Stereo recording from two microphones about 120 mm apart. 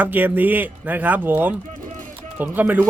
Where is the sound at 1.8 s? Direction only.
90° right.